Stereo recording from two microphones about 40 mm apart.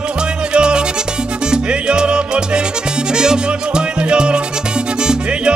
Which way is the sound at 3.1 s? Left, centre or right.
Centre.